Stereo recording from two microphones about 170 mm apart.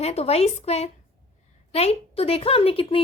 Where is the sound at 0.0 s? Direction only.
40° left (ahead or behind).